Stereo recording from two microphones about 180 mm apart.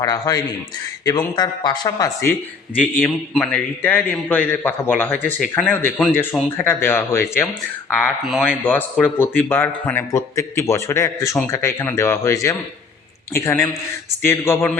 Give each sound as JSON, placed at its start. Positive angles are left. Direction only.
{"t": 0.0, "sound": "speech", "side_deg": 20}
{"t": 2.7, "sound": "a man's voice", "side_deg": 10}
{"t": 8.4, "sound": "a man's voice", "side_deg": 10}